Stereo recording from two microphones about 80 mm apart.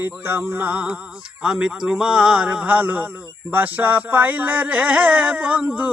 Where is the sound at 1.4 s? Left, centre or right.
Centre.